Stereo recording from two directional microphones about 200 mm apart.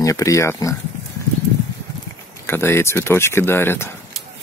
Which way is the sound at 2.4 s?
10° left (ahead or behind).